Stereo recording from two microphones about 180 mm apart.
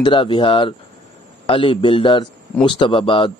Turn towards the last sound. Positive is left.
turn(degrees=30)  # may be behind; listen again after turning